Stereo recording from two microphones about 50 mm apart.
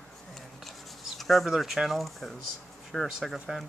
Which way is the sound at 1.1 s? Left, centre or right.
Centre.